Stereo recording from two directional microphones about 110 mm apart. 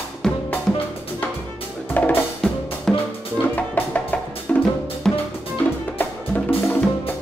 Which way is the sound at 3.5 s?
15° left (ahead or behind).